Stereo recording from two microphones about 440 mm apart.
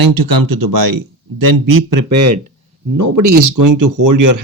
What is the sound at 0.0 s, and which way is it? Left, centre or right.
Speech, right.